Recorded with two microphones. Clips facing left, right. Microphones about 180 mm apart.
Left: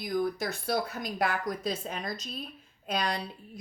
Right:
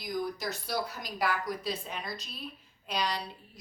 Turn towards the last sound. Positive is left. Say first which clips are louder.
# left 2 dB
turn(degrees=50)  # may be behind; listen again after turning